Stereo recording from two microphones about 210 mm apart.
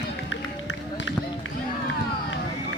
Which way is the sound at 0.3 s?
65° left (ahead or behind).